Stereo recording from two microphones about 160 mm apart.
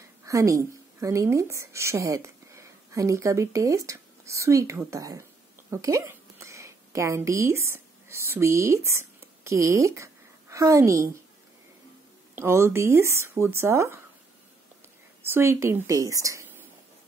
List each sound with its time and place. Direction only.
0.2 s a woman's voice: 20° right (ahead or behind)
12.4 s speech: 15° right (ahead or behind)
15.2 s speech: 15° right (ahead or behind)